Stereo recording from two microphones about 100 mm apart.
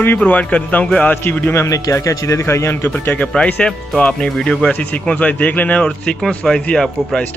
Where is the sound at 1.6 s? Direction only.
30° left (ahead or behind).